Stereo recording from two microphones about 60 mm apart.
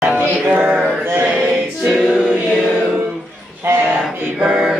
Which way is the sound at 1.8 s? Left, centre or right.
Centre.